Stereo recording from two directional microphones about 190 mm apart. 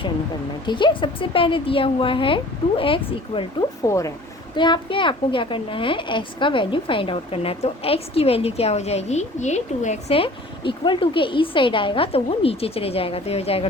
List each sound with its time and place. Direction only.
0.6 s a woman's voice: 25° left (ahead or behind)
3.8 s a woman's voice: 15° left (ahead or behind); by 13.7 s 30° left (ahead or behind)